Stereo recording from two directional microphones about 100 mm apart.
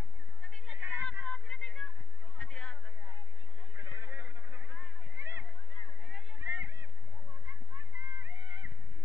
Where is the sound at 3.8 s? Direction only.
20° right (ahead or behind).